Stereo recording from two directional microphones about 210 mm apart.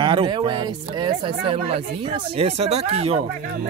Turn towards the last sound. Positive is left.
turn(degrees=-30)  # may be behind; listen again after turning